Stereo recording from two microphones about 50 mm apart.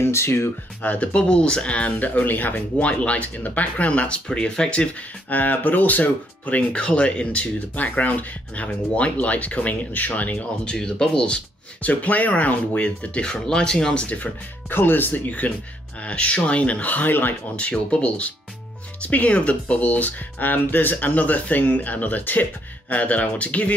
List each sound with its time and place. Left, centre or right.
0.0 s speech: left
0.8 s speech: left
2.2 s speech: left
2.8 s speech: left
5.3 s speech: left
10.6 s speech: centre
14.1 s speech: left
17.6 s speech: left